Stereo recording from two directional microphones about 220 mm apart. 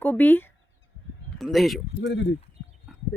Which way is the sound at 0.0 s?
10° left (ahead or behind).